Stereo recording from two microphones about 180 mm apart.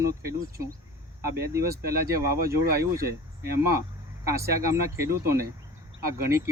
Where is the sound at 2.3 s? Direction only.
55° right (ahead or behind).